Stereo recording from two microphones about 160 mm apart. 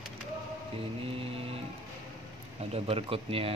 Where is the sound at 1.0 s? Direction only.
35° right (ahead or behind).